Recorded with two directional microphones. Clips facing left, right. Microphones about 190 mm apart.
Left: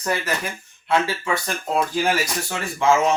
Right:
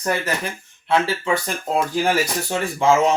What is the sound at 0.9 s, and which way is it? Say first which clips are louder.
Speech: right 2 dB; 30° right (ahead or behind).